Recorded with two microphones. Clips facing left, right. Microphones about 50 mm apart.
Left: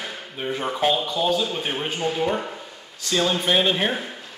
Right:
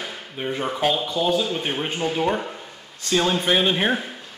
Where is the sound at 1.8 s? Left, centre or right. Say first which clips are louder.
Right 1 dB; centre.